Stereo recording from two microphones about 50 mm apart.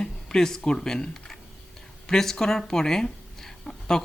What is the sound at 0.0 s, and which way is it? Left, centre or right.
Speech, centre.